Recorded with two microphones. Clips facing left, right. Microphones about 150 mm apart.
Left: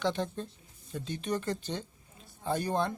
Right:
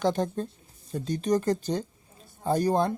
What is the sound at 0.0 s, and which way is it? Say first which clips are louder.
Speech: right 6 dB; 45° right (ahead or behind).